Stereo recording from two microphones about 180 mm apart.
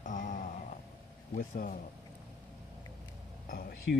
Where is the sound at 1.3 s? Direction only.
45° left (ahead or behind).